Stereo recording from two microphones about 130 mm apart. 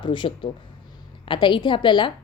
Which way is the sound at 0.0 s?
40° left (ahead or behind).